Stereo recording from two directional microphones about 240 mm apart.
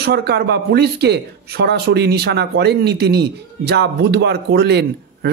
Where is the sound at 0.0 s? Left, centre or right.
Right.